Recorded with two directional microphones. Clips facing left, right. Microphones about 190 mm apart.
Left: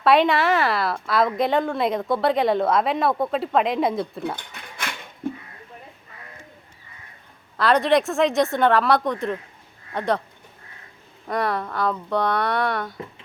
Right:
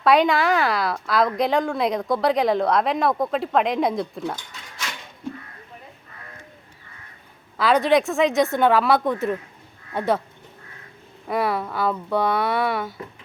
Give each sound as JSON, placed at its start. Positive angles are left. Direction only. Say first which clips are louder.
{"t": 0.0, "sound": "a woman's voice", "louder": "even", "side_deg": 0}
{"t": 4.4, "sound": "speech", "louder": "left 2 dB", "side_deg": 55}
{"t": 5.2, "sound": "a sound", "louder": "left 4 dB", "side_deg": 55}
{"t": 7.5, "sound": "a woman's voice", "louder": "even", "side_deg": 0}
{"t": 11.3, "sound": "a woman's voice", "louder": "right 1 dB", "side_deg": -5}